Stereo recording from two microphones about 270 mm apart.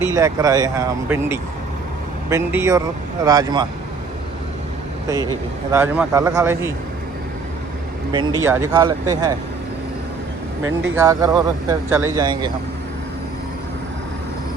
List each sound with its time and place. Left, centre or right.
0.1 s speech: centre
5.0 s speech: centre
8.1 s speech: centre
10.9 s speech: centre